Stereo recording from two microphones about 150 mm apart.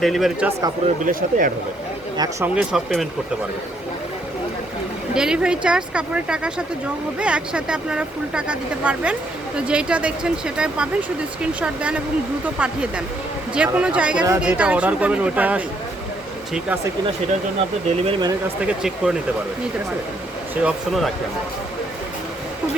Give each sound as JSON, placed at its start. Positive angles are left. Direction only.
{"t": 0.0, "sound": "speech", "side_deg": 0}
{"t": 1.0, "sound": "speech", "side_deg": -65}
{"t": 2.4, "sound": "speech", "side_deg": -5}
{"t": 5.1, "sound": "speech", "side_deg": -5}
{"t": 17.8, "sound": "speech", "side_deg": -40}
{"t": 18.4, "sound": "speech", "side_deg": -5}
{"t": 20.6, "sound": "speech", "side_deg": -5}